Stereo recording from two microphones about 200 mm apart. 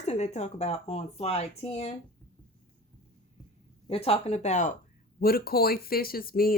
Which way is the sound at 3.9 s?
30° left (ahead or behind).